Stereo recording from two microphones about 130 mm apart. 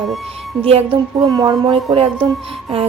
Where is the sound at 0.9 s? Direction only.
30° right (ahead or behind).